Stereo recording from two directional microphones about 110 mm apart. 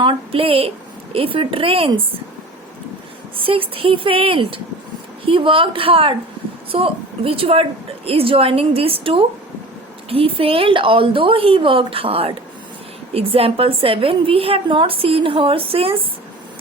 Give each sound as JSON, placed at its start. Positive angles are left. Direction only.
{"t": 0.0, "sound": "a woman's voice", "side_deg": -50}
{"t": 3.4, "sound": "a woman's voice", "side_deg": -55}